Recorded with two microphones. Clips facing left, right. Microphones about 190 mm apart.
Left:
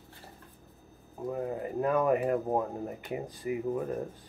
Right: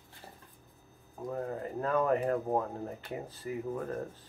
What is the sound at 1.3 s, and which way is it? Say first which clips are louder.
Speech: left 3 dB; 10° left (ahead or behind).